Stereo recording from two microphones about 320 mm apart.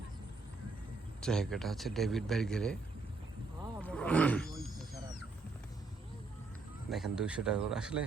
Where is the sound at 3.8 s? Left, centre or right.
Centre.